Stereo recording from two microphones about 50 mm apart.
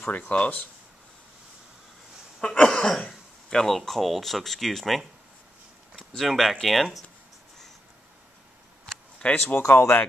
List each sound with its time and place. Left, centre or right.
0.1 s speech: left
2.4 s cough: centre
3.1 s speech: centre
9.2 s speech: left
9.6 s speech: left